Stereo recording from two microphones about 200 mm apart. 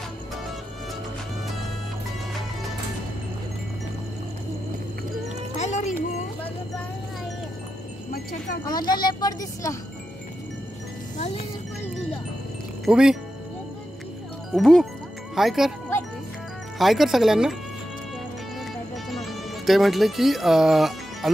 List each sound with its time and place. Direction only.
5.6 s music: 35° left (ahead or behind)
8.1 s music: 45° left (ahead or behind)
8.6 s speech: 20° left (ahead or behind)
11.1 s music: 35° left (ahead or behind)
12.8 s speech: 5° right (ahead or behind)
14.5 s speech: centre (ahead or behind)
16.7 s speech: centre (ahead or behind)
19.0 s music: centre (ahead or behind)